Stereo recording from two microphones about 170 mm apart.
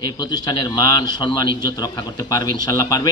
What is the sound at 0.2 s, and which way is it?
A man's voice, 25° left (ahead or behind).